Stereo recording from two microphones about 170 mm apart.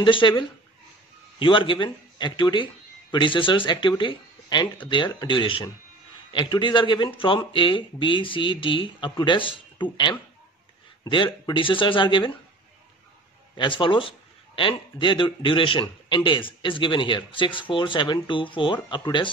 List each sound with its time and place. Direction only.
0.0 s speech: 30° left (ahead or behind)
13.6 s a man's voice: 30° left (ahead or behind)